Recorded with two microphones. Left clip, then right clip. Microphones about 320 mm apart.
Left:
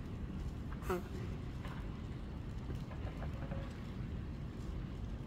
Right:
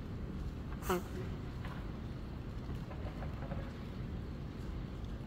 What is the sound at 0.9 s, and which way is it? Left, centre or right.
Speech, right.